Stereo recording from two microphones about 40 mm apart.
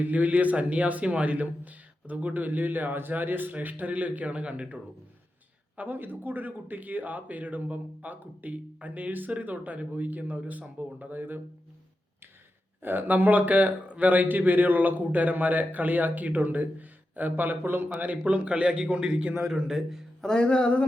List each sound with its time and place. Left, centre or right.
0.0 s a man's voice: right
5.7 s speech: right
6.0 s a man's voice: right
11.1 s speech: right
12.8 s speech: right
13.1 s speech: right
18.3 s a man's voice: right; by 20.1 s centre
20.2 s music: centre